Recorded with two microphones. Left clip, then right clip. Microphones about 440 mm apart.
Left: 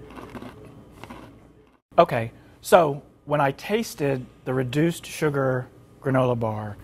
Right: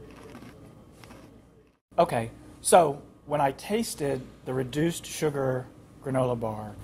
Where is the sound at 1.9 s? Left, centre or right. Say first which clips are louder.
Left 5 dB; left.